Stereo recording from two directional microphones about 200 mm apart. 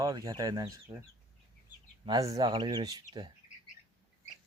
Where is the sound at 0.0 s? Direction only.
20° right (ahead or behind).